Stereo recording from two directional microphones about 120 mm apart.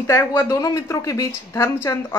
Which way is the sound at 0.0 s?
20° left (ahead or behind).